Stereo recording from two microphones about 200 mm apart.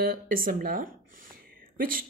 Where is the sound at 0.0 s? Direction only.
45° right (ahead or behind).